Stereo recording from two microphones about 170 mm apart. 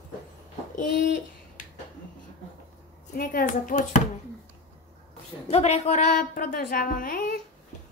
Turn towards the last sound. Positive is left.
turn(degrees=55)  # may be behind; listen again after turning